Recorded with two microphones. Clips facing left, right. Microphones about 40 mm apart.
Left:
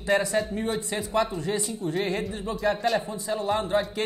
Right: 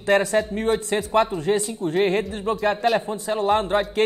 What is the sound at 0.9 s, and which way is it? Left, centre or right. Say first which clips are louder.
A man's voice: right 4 dB; right.